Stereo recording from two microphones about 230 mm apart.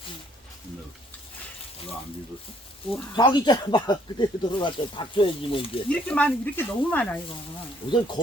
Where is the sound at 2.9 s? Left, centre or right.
Centre.